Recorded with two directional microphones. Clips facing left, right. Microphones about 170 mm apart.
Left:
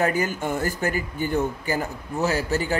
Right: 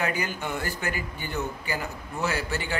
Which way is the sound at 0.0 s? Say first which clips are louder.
Left 6 dB; 45° left (ahead or behind).